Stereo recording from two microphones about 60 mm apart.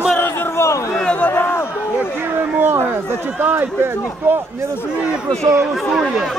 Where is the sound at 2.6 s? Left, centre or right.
Right.